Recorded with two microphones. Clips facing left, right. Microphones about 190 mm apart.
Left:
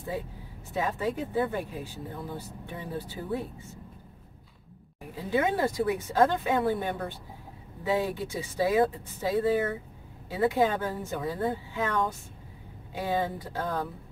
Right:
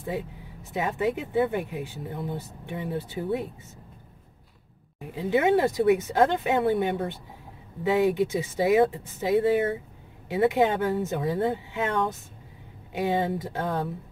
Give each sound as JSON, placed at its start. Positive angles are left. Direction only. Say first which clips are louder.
{"t": 0.7, "sound": "speech", "louder": "right 3 dB", "side_deg": -20}
{"t": 5.1, "sound": "speech", "louder": "right 5 dB", "side_deg": -25}